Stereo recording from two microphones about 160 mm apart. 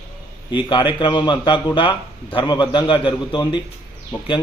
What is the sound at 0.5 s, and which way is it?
A man's voice, 30° left (ahead or behind).